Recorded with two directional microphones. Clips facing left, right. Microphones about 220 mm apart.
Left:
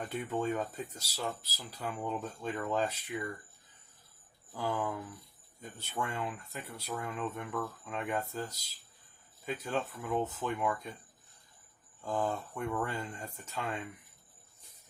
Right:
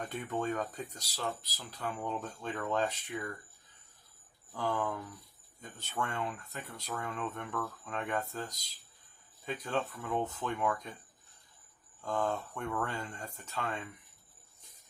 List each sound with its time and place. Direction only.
0.0 s speech: 10° left (ahead or behind)
4.5 s speech: 10° left (ahead or behind)
12.0 s speech: 10° left (ahead or behind)